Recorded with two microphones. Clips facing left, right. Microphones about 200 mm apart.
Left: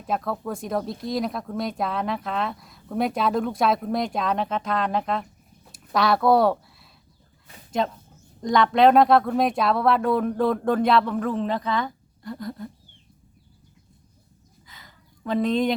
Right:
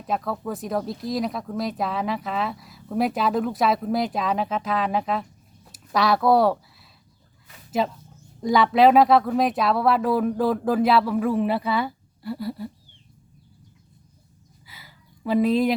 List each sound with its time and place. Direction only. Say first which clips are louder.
0.0 s speech: even; centre (ahead or behind)
7.8 s speech: right 1 dB; 5° right (ahead or behind)
14.7 s a sound: right 1 dB; 5° right (ahead or behind)